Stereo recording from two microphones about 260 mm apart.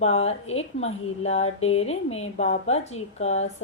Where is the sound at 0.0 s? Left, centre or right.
Left.